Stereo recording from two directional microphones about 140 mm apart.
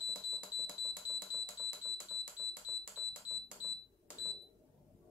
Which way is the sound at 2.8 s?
5° right (ahead or behind).